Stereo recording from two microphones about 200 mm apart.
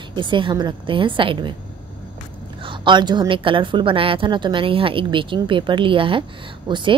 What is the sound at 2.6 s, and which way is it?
A woman's voice, 25° right (ahead or behind).